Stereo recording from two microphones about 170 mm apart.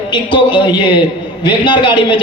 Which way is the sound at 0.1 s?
25° left (ahead or behind).